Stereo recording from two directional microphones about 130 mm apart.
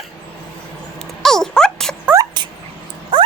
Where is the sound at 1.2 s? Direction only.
5° left (ahead or behind).